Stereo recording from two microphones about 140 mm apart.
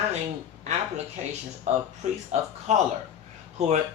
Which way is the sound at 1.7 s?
55° right (ahead or behind).